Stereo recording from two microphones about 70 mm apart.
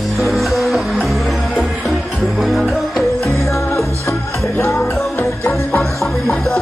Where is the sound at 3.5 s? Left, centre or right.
Left.